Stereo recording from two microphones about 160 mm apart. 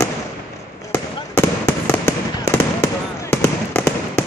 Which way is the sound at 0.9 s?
15° left (ahead or behind).